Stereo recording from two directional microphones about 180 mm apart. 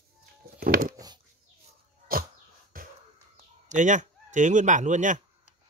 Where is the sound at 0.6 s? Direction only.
55° right (ahead or behind).